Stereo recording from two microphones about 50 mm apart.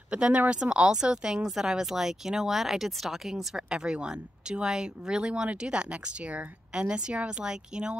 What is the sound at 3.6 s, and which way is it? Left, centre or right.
Speech, centre.